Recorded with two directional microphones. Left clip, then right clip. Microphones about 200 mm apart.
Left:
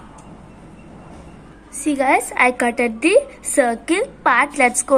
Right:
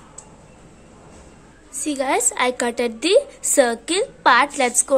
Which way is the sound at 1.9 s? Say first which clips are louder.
Left 5 dB; 10° right (ahead or behind).